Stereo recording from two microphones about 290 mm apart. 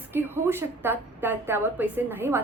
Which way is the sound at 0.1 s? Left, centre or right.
Centre.